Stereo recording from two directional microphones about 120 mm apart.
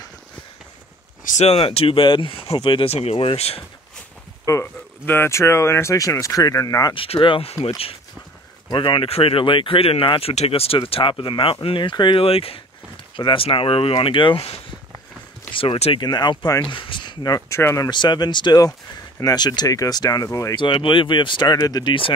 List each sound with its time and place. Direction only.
1.2 s speech: 65° left (ahead or behind)
1.6 s speech: 50° left (ahead or behind)
2.9 s speech: 55° left (ahead or behind)
4.5 s speech: 20° left (ahead or behind)
6.9 s speech: 50° left (ahead or behind)
8.6 s speech: 40° left (ahead or behind)
10.3 s speech: 60° left (ahead or behind)
16.0 s speech: 35° left (ahead or behind)
16.6 s speech: 45° left (ahead or behind)
17.6 s speech: 20° left (ahead or behind)
17.8 s speech: 40° left (ahead or behind)
20.5 s speech: 40° left (ahead or behind)